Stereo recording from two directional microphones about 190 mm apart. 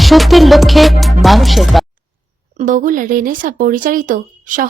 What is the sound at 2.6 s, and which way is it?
Speech, 45° right (ahead or behind).